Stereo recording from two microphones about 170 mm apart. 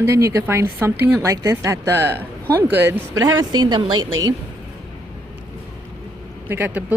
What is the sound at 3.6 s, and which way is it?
Speech, 25° right (ahead or behind).